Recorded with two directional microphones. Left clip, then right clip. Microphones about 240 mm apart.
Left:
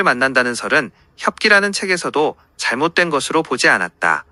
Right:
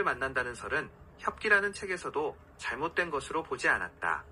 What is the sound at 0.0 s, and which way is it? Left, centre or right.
Speech, left.